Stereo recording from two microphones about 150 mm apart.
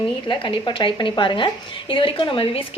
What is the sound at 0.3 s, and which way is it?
A woman's voice, 30° left (ahead or behind).